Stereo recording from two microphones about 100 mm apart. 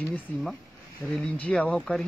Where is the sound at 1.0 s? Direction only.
15° right (ahead or behind).